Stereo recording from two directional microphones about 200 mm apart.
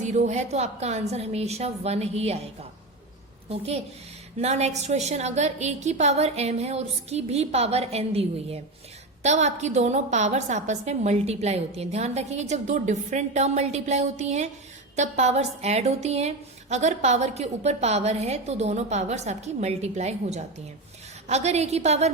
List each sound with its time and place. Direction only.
0.0 s a woman's voice: 35° right (ahead or behind)
4.4 s a woman's voice: 35° right (ahead or behind)